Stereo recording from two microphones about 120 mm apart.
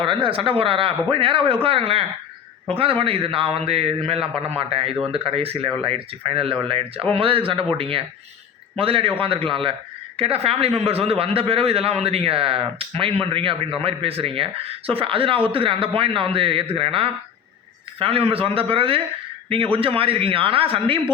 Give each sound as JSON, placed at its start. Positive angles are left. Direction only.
{"t": 0.0, "sound": "speech", "side_deg": -45}